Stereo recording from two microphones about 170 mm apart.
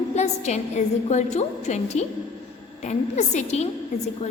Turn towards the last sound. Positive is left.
turn(degrees=40)  # may be behind; listen again after turning